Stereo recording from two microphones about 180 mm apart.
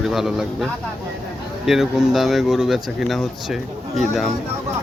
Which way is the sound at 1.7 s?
Centre (ahead or behind).